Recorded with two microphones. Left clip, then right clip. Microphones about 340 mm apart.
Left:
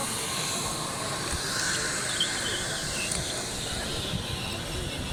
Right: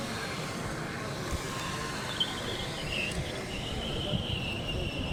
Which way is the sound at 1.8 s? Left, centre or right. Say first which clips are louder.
Left 4 dB; right.